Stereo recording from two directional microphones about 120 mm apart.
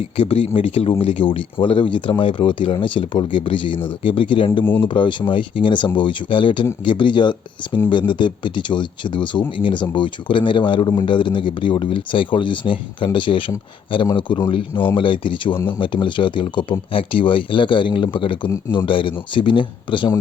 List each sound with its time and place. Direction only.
0.2 s a man's voice: 55° left (ahead or behind)
4.6 s speech: 15° left (ahead or behind)
4.9 s a man's voice: 40° left (ahead or behind)